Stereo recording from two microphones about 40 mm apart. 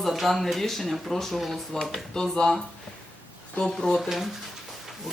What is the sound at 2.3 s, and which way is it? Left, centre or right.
Speech, centre.